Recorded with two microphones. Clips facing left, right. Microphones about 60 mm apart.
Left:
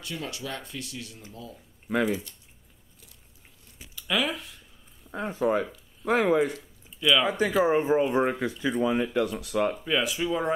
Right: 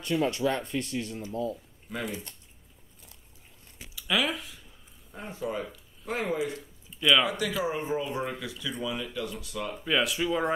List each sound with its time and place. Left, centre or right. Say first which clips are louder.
0.3 s speech: right 8 dB; right
1.9 s speech: left 9 dB; left
3.9 s speech: even; centre
5.1 s speech: left 8 dB; left
7.0 s speech: even; centre
7.6 s speech: left 8 dB; left
9.8 s speech: even; centre